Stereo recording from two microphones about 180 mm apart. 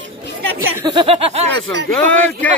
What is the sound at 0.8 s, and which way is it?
Speech, 35° right (ahead or behind).